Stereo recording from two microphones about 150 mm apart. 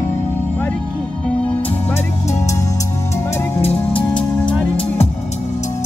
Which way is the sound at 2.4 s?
20° left (ahead or behind).